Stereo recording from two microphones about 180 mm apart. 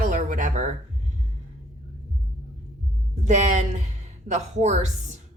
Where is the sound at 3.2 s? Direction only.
40° right (ahead or behind).